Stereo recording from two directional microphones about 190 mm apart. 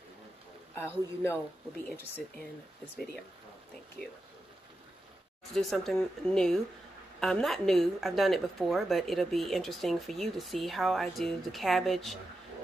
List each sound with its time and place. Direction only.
0.7 s a man's voice: 10° left (ahead or behind)
5.5 s a woman's voice: centre (ahead or behind)